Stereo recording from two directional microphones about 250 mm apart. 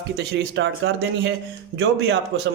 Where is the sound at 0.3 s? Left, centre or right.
Right.